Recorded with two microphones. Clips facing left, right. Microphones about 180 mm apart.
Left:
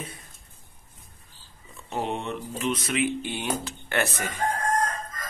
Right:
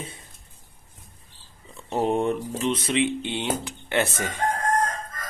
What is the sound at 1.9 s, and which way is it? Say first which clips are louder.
Speech: right 7 dB; 40° right (ahead or behind).